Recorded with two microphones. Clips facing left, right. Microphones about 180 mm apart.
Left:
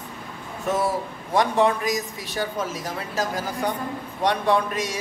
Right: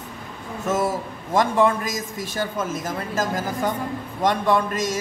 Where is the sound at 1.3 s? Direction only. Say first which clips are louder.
Right 1 dB; 45° right (ahead or behind).